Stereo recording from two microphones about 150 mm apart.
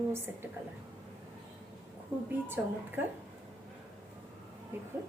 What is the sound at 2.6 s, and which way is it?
Speech, 10° right (ahead or behind).